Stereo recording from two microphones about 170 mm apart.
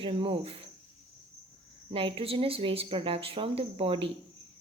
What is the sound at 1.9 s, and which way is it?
Speech, 30° right (ahead or behind).